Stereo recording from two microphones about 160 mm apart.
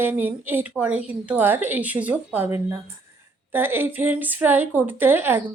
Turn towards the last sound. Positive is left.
turn(degrees=-15)  # may be behind; listen again after turning